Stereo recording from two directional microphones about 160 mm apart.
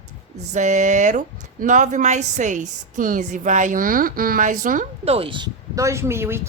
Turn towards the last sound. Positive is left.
turn(degrees=-15)  # may be behind; listen again after turning